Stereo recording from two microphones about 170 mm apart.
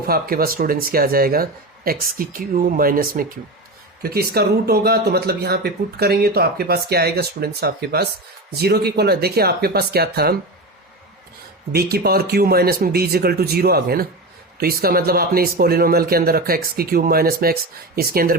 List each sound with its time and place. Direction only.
0.0 s speech: 60° right (ahead or behind)
11.7 s speech: 65° right (ahead or behind)